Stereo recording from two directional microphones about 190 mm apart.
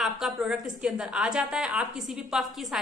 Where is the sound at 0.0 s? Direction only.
5° right (ahead or behind).